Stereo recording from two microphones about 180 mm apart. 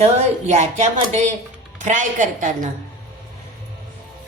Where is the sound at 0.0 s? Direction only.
35° right (ahead or behind).